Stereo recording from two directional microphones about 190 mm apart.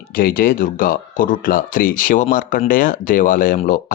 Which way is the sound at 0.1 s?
50° left (ahead or behind).